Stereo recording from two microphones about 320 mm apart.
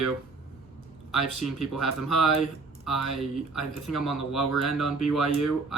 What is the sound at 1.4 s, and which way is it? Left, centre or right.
Speech, centre.